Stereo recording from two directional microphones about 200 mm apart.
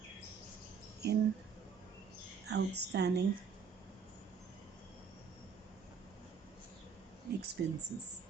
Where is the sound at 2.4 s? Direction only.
55° right (ahead or behind).